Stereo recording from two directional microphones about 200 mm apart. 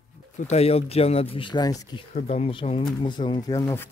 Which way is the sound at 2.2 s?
35° left (ahead or behind).